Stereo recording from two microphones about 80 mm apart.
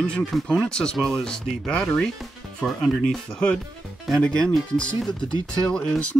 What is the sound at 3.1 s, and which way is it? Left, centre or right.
Speech, centre.